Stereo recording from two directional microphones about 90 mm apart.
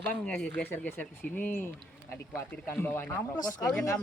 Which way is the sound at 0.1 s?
15° left (ahead or behind).